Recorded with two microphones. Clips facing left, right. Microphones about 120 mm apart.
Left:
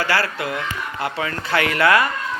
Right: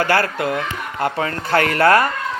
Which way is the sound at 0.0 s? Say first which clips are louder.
Right 4 dB; 50° right (ahead or behind).